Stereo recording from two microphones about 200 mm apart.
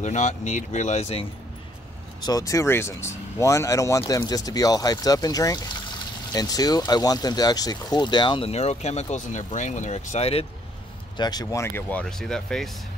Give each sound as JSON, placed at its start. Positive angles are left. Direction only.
{"t": 0.0, "sound": "speech", "side_deg": 35}
{"t": 2.2, "sound": "speech", "side_deg": 15}
{"t": 11.1, "sound": "speech", "side_deg": 20}